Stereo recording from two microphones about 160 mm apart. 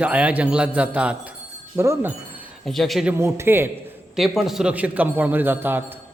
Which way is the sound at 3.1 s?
15° right (ahead or behind).